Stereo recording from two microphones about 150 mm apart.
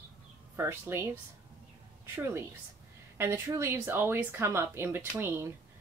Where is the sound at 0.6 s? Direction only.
15° right (ahead or behind).